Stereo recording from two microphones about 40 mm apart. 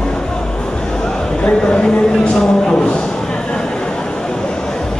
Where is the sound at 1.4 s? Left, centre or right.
Left.